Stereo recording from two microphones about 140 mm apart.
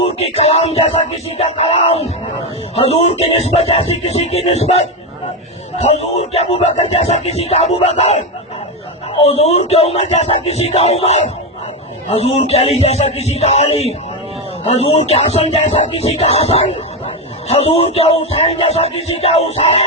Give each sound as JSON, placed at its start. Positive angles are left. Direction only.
{"t": 0.3, "sound": "music", "side_deg": 45}